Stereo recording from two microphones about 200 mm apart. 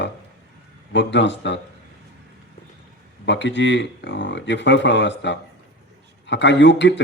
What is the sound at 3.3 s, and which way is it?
Speech, 60° left (ahead or behind).